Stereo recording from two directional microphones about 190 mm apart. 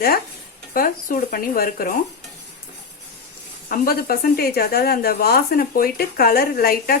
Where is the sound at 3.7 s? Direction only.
50° left (ahead or behind).